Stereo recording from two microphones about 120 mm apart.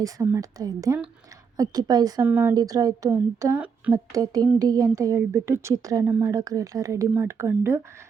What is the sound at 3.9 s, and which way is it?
A woman's voice, 30° right (ahead or behind).